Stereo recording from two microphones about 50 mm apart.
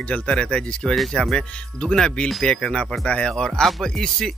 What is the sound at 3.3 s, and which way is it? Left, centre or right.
Speech, centre.